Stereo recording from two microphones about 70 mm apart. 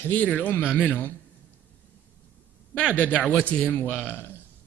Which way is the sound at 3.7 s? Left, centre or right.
Left.